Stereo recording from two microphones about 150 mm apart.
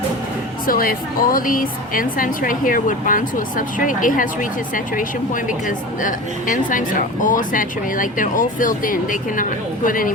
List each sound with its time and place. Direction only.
0.7 s a woman's voice: 70° left (ahead or behind)